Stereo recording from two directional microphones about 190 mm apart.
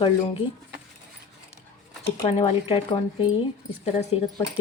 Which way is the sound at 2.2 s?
35° left (ahead or behind).